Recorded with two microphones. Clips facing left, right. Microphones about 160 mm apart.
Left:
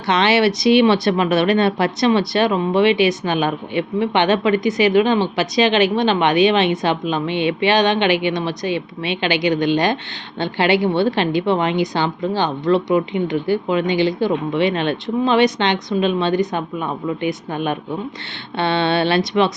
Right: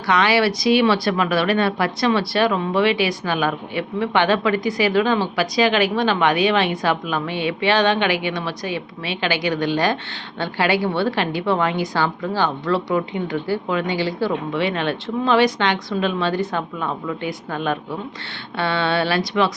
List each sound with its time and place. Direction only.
0.1 s a woman's voice: 25° left (ahead or behind)